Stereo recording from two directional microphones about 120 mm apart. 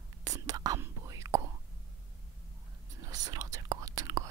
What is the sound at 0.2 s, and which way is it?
Whispering, 30° right (ahead or behind).